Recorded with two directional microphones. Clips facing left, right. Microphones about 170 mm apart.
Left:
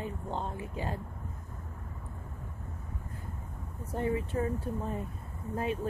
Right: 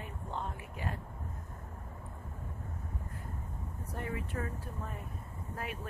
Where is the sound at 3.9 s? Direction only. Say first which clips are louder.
Left 8 dB; 25° left (ahead or behind).